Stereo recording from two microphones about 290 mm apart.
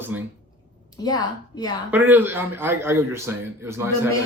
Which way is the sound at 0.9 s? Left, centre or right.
Centre.